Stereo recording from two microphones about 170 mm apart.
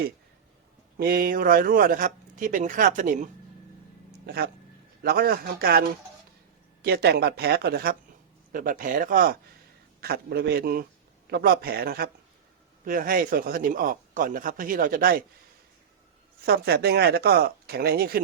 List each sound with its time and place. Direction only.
0.9 s a man's voice: 60° right (ahead or behind)
4.3 s a man's voice: 65° right (ahead or behind)
6.8 s speech: 65° right (ahead or behind)
8.5 s speech: 55° right (ahead or behind)
10.0 s a man's voice: 70° right (ahead or behind)
16.5 s speech: 70° right (ahead or behind)